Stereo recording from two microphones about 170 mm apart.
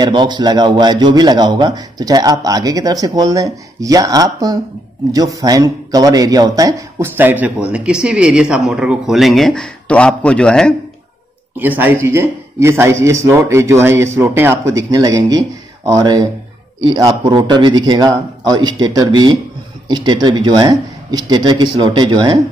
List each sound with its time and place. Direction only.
0.0 s a man's voice: 25° right (ahead or behind); by 10.7 s 5° left (ahead or behind)
11.5 s a man's voice: 10° right (ahead or behind)